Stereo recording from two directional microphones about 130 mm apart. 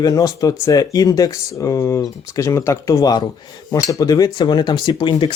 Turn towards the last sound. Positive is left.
turn(degrees=40)  # may be behind; listen again after turning